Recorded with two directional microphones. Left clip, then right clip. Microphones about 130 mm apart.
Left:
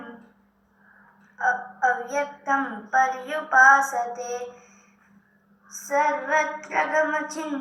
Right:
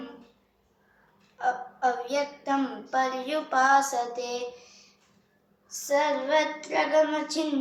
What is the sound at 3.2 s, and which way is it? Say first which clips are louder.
Child singing: left 10 dB; 40° right (ahead or behind).